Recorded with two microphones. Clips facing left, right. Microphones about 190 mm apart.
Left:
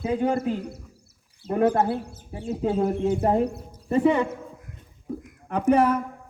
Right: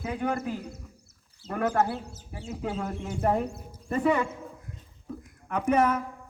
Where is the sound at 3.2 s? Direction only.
35° left (ahead or behind).